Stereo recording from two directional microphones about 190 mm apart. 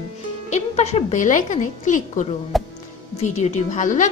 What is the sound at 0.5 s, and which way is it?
A woman's voice, 35° left (ahead or behind).